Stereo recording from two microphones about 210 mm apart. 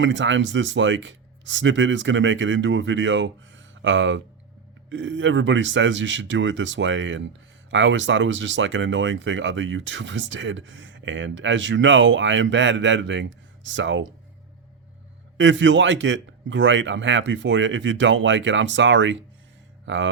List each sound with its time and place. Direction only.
0.0 s speech: 60° right (ahead or behind)
15.4 s speech: 60° right (ahead or behind)